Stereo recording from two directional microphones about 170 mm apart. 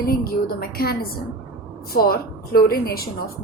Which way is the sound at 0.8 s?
60° left (ahead or behind).